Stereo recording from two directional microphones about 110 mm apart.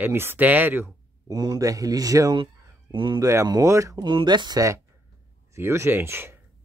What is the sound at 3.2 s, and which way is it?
Speech, 30° right (ahead or behind).